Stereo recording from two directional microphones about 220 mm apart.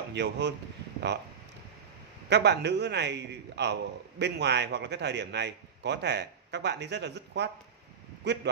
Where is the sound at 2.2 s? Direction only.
50° right (ahead or behind).